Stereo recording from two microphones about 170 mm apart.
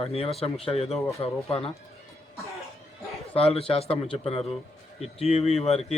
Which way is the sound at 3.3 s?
35° left (ahead or behind).